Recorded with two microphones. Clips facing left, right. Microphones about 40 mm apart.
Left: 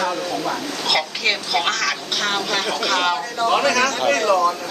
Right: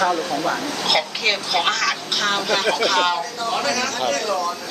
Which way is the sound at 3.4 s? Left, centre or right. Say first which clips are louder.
Left 8 dB; left.